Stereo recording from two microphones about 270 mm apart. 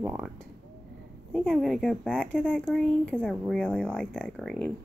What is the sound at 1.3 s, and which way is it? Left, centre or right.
Speech, centre.